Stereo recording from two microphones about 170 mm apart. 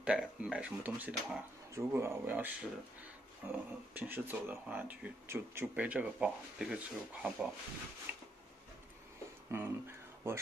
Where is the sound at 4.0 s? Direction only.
10° right (ahead or behind).